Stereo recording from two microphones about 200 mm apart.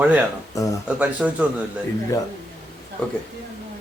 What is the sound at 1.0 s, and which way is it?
Speech, 5° right (ahead or behind).